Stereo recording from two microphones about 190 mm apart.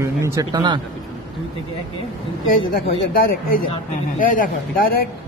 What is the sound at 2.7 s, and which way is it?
Speech, 50° left (ahead or behind).